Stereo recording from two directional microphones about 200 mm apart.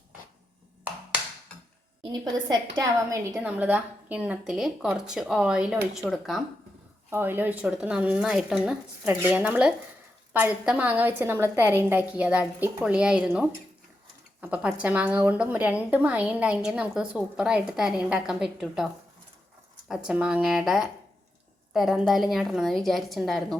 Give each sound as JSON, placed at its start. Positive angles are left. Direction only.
{"t": 2.0, "sound": "a woman's voice", "side_deg": -20}
{"t": 3.3, "sound": "a woman's voice", "side_deg": -5}
{"t": 7.1, "sound": "a woman's voice", "side_deg": -10}
{"t": 20.1, "sound": "a woman's voice", "side_deg": -5}